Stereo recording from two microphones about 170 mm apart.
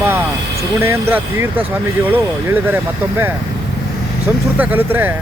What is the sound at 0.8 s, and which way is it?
Speech, 15° right (ahead or behind).